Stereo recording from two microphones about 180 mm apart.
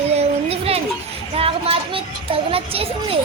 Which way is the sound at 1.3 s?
30° right (ahead or behind).